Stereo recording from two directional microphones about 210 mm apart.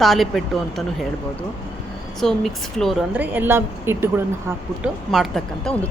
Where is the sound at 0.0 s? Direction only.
Centre (ahead or behind).